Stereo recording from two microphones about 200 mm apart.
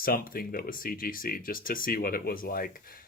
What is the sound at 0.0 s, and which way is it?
Speech, 45° left (ahead or behind).